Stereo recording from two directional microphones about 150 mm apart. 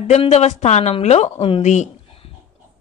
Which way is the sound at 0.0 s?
50° left (ahead or behind).